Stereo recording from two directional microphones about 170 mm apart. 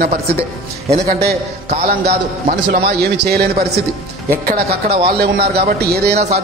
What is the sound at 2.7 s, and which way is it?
Speech, 70° right (ahead or behind).